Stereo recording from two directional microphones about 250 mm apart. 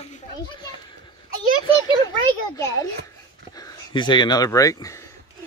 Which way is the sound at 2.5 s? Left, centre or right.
Centre.